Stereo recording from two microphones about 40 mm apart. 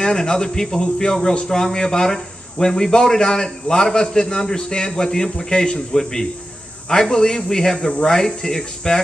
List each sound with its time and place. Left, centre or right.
0.0 s speech: centre